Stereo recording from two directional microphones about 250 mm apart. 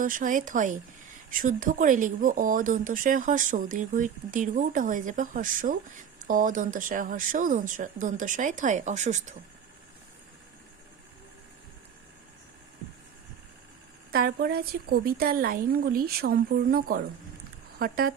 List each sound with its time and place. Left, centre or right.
0.0 s speech: right
14.1 s speech: right